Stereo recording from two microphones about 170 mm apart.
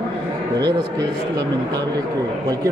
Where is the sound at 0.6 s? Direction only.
25° right (ahead or behind).